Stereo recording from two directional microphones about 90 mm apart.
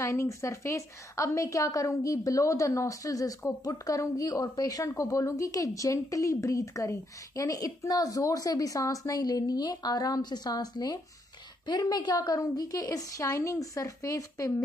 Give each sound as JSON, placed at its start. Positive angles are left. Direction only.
{"t": 0.0, "sound": "a woman's voice", "side_deg": 30}